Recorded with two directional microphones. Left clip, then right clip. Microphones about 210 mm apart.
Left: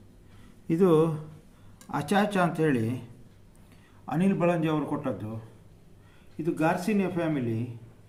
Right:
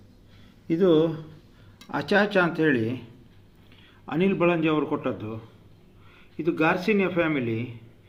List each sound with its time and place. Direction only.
0.7 s speech: 60° left (ahead or behind)
2.0 s speech: 45° left (ahead or behind)
4.1 s a man's voice: 40° left (ahead or behind)
6.4 s speech: 15° left (ahead or behind)